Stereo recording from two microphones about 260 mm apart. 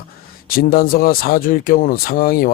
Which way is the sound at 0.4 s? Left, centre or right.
Left.